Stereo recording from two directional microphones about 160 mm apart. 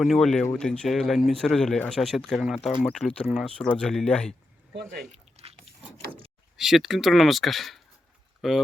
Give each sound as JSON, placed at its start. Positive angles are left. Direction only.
{"t": 0.0, "sound": "speech", "side_deg": 0}
{"t": 4.7, "sound": "speech", "side_deg": -90}
{"t": 5.1, "sound": "a sound", "side_deg": -40}
{"t": 6.6, "sound": "speech", "side_deg": 0}